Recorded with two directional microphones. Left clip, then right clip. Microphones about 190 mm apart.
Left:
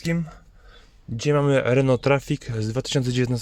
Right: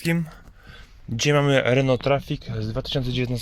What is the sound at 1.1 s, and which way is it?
Speech, 5° left (ahead or behind).